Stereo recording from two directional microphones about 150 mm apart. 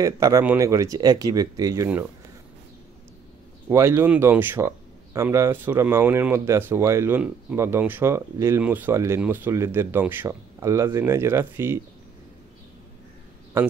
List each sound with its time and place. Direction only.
0.0 s speech: 20° right (ahead or behind)
3.7 s speech: 15° right (ahead or behind)